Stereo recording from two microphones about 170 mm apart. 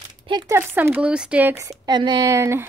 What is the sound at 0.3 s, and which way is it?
Speech, 25° right (ahead or behind).